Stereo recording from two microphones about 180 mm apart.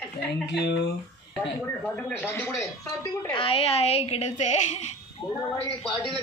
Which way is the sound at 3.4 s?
30° left (ahead or behind).